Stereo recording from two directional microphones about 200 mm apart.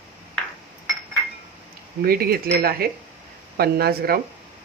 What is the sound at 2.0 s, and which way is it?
Speech, 50° right (ahead or behind).